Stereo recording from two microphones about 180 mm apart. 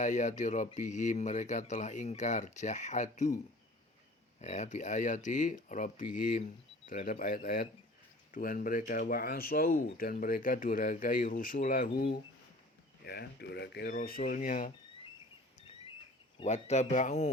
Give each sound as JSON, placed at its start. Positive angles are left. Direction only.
{"t": 0.0, "sound": "speech", "side_deg": 45}
{"t": 13.1, "sound": "speech", "side_deg": 65}
{"t": 13.9, "sound": "speech", "side_deg": 50}
{"t": 16.4, "sound": "speech", "side_deg": 40}